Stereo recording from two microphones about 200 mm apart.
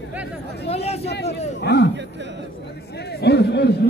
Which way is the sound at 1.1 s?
55° left (ahead or behind).